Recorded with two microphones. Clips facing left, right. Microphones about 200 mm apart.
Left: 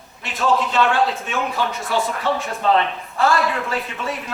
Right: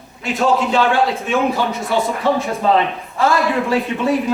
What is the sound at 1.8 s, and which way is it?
Speech, 15° right (ahead or behind).